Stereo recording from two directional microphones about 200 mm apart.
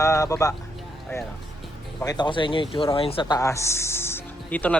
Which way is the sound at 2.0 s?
20° left (ahead or behind).